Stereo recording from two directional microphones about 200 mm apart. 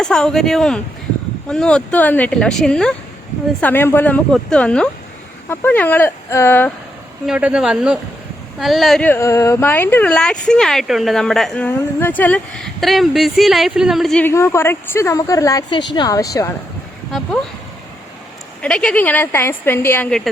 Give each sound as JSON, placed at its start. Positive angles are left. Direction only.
{"t": 0.0, "sound": "a woman's voice", "side_deg": 5}
{"t": 7.3, "sound": "a woman's voice", "side_deg": -5}
{"t": 17.1, "sound": "a woman's voice", "side_deg": 0}
{"t": 18.6, "sound": "a woman's voice", "side_deg": 5}